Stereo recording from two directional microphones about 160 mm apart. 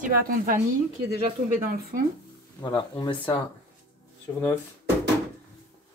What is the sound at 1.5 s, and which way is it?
Speech, 60° right (ahead or behind).